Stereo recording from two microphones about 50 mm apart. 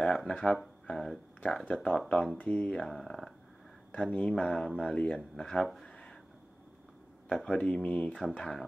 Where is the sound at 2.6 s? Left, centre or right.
Left.